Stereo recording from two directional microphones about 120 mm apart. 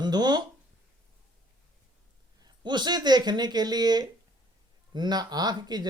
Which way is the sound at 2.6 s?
35° right (ahead or behind).